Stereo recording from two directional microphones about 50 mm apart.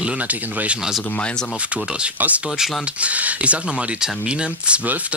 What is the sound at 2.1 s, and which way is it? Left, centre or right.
Speech, right.